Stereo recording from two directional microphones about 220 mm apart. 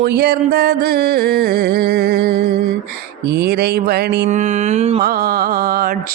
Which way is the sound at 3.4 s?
45° right (ahead or behind).